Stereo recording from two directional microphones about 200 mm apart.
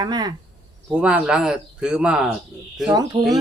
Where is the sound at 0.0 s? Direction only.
20° right (ahead or behind).